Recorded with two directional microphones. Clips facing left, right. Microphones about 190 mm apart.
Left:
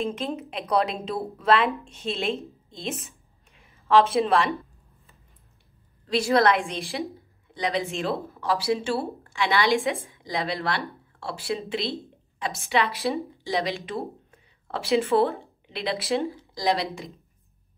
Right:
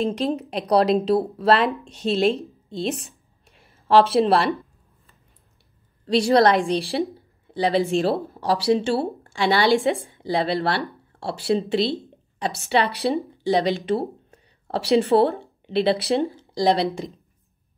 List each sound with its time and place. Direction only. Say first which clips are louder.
0.0 s a woman's voice: right 6 dB; 35° right (ahead or behind)
3.8 s a woman's voice: right 3 dB; 35° right (ahead or behind)
6.0 s a woman's voice: right 4 dB; 35° right (ahead or behind)